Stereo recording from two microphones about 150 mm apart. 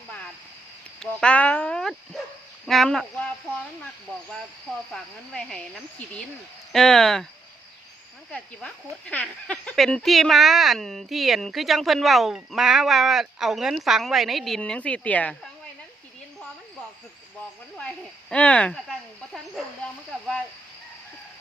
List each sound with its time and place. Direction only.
0.9 s dog: 5° left (ahead or behind)
2.6 s speech: centre (ahead or behind)
4.9 s speech: 5° left (ahead or behind)
8.3 s speech: 5° left (ahead or behind)
17.7 s speech: 10° left (ahead or behind)